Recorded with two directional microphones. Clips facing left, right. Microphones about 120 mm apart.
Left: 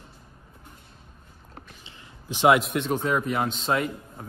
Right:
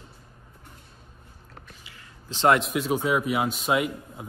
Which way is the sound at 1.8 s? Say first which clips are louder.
Left 6 dB; 20° left (ahead or behind).